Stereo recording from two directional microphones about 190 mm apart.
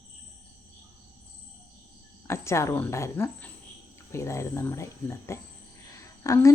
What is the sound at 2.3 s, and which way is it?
Speech, 15° left (ahead or behind).